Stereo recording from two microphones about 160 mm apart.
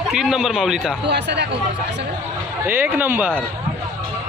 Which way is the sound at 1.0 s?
90° right.